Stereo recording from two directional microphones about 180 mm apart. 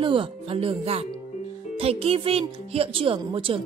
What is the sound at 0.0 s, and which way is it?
A woman's voice, 30° right (ahead or behind).